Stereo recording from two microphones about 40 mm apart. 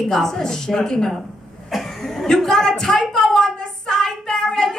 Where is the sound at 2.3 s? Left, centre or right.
Centre.